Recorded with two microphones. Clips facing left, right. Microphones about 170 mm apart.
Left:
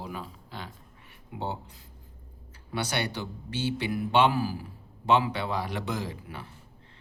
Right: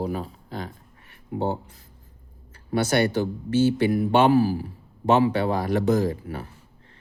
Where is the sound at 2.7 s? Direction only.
45° right (ahead or behind).